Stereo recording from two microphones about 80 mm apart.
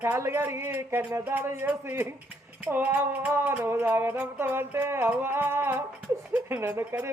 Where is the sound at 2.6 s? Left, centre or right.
Right.